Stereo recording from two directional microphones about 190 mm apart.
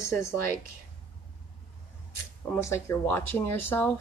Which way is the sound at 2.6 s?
15° left (ahead or behind).